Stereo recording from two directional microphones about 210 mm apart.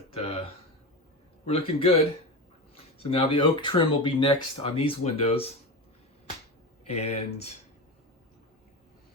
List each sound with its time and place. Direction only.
0.1 s a sound: 25° left (ahead or behind)
1.5 s speech: 25° left (ahead or behind)
6.8 s speech: 30° left (ahead or behind)